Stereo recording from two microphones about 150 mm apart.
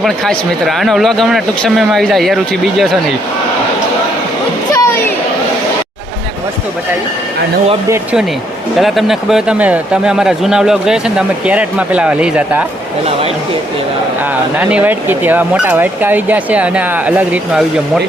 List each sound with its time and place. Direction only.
0.0 s a man's voice: centre (ahead or behind)
4.7 s a sound: 20° left (ahead or behind)
8.8 s a man's voice: centre (ahead or behind)
14.6 s speech: 10° right (ahead or behind)